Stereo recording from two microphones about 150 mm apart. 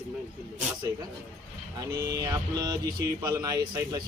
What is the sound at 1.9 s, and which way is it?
Speech, 25° right (ahead or behind).